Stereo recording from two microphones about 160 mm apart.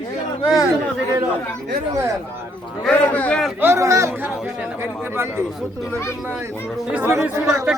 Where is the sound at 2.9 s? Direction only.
10° left (ahead or behind).